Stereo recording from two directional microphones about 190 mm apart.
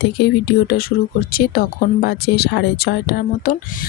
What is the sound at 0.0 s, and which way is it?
Speech, 60° left (ahead or behind).